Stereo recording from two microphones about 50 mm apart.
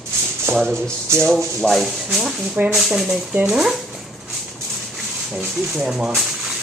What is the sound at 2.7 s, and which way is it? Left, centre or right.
Speech, centre.